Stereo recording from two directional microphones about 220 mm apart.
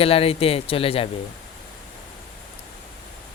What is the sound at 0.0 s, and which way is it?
Speech, 25° left (ahead or behind).